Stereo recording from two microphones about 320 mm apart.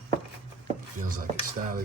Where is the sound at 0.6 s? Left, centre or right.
Right.